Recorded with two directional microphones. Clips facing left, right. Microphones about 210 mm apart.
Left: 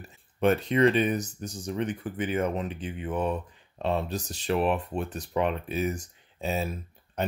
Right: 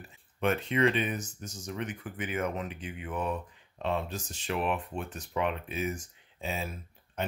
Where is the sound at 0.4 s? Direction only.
35° left (ahead or behind).